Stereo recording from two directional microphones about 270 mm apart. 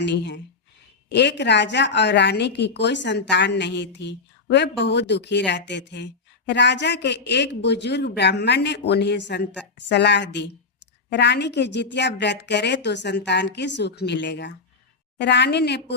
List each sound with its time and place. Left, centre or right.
0.0 s a woman's voice: left